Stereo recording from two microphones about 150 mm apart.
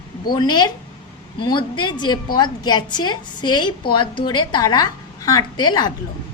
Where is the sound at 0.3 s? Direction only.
25° left (ahead or behind).